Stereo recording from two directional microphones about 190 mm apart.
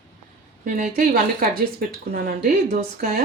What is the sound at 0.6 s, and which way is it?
Speech, 45° right (ahead or behind).